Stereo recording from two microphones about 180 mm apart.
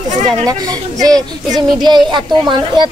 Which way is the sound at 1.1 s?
25° right (ahead or behind).